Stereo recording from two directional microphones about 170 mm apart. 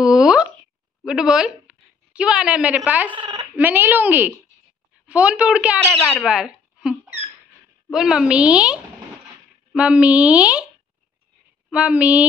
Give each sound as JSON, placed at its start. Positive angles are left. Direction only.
{"t": 0.0, "sound": "plop", "side_deg": -5}
{"t": 1.0, "sound": "speech", "side_deg": -5}
{"t": 3.2, "sound": "speech", "side_deg": -20}
{"t": 3.5, "sound": "a woman's voice", "side_deg": -10}
{"t": 11.7, "sound": "speech", "side_deg": -5}